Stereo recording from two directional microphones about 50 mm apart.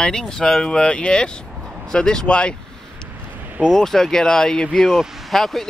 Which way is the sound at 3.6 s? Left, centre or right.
Centre.